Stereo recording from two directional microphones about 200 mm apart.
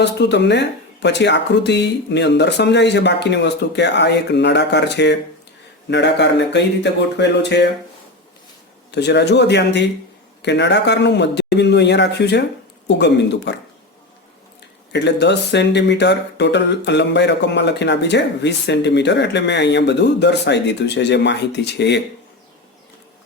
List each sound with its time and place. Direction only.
0.0 s speech: 60° left (ahead or behind)
8.9 s speech: 60° left (ahead or behind)
14.9 s speech: 60° left (ahead or behind)